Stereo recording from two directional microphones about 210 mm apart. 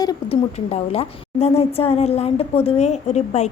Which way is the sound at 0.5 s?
30° left (ahead or behind).